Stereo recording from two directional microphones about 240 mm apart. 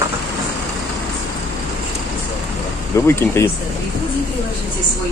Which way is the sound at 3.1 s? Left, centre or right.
Centre.